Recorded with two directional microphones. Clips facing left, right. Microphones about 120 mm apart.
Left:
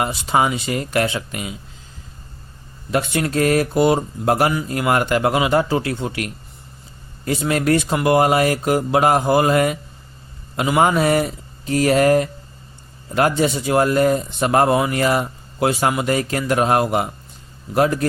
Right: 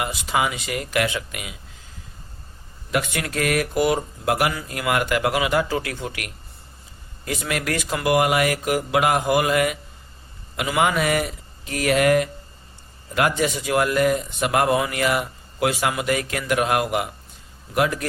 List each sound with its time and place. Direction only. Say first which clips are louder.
0.0 s speech: left 5 dB; 35° left (ahead or behind)
2.9 s a man's voice: left 5 dB; 30° left (ahead or behind)